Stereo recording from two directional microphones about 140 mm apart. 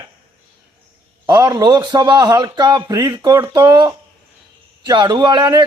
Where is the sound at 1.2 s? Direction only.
25° right (ahead or behind).